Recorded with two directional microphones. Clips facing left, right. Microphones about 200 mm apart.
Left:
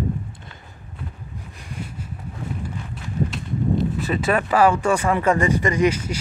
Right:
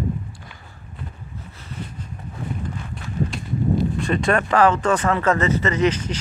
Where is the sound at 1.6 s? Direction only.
10° left (ahead or behind).